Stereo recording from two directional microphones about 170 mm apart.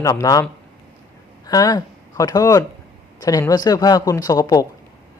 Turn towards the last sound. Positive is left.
turn(degrees=20)  # may be behind; listen again after turning